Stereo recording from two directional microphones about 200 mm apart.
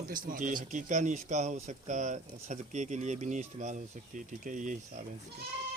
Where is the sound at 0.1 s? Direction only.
45° right (ahead or behind).